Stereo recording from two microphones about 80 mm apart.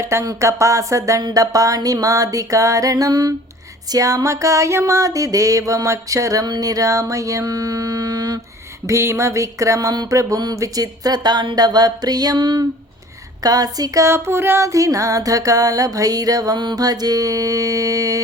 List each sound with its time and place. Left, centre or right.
0.0 s speech: right
1.2 s music: right
6.4 s music: right
8.9 s speech: right
10.1 s a sound: right
13.4 s music: right
16.6 s music: right